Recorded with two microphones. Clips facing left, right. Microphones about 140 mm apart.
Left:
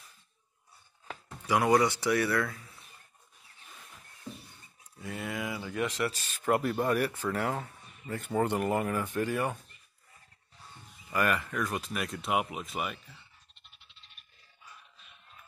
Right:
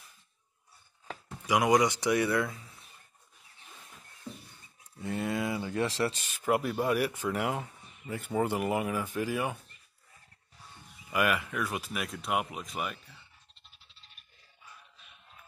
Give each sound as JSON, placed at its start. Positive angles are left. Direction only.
{"t": 1.4, "sound": "speech", "side_deg": -15}
{"t": 5.0, "sound": "speech", "side_deg": -30}
{"t": 6.2, "sound": "speech", "side_deg": -10}
{"t": 11.1, "sound": "speech", "side_deg": -10}
{"t": 13.6, "sound": "music", "side_deg": -35}